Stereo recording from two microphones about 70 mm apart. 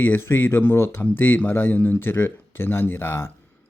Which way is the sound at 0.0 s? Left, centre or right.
Left.